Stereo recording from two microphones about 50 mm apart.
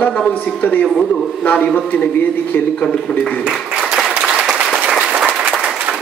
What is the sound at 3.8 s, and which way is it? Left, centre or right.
Applause, centre.